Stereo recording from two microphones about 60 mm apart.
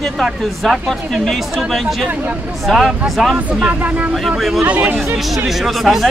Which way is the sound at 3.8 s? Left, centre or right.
Right.